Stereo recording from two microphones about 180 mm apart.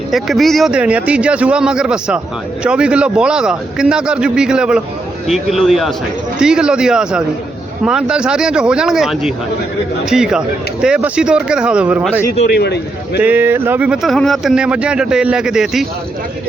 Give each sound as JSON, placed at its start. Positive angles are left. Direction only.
{"t": 0.1, "sound": "speech", "side_deg": 0}
{"t": 12.5, "sound": "a man's voice", "side_deg": 65}
{"t": 13.2, "sound": "speech", "side_deg": -10}